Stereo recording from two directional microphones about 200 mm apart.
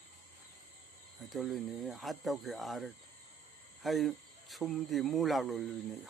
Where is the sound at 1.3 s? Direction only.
Centre (ahead or behind).